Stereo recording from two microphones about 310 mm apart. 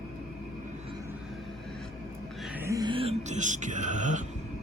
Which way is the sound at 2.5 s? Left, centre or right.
Centre.